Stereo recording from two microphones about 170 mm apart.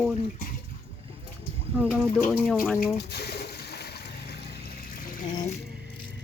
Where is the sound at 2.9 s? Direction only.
70° left (ahead or behind).